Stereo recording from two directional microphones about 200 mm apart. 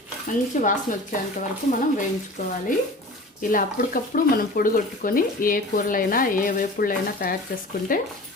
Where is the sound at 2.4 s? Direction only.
45° left (ahead or behind).